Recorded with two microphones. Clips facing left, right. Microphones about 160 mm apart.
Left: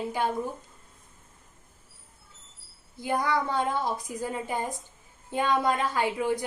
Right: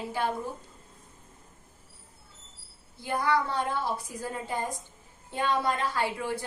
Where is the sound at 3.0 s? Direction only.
15° left (ahead or behind).